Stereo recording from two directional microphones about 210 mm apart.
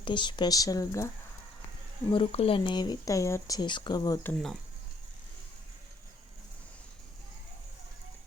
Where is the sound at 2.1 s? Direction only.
25° left (ahead or behind).